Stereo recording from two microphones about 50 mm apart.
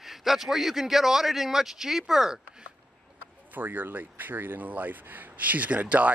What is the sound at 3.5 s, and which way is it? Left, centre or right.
Speech, right.